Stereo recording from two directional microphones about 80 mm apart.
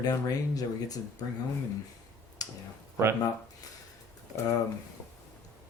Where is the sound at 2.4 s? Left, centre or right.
Left.